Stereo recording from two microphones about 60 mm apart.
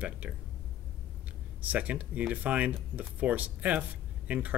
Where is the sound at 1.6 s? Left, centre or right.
Right.